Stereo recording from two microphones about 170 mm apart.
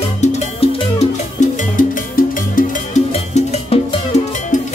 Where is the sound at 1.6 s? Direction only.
55° left (ahead or behind).